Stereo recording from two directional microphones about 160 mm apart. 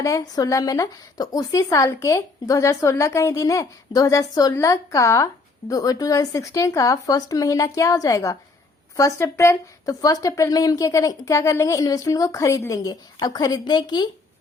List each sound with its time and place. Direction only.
0.0 s speech: 20° left (ahead or behind)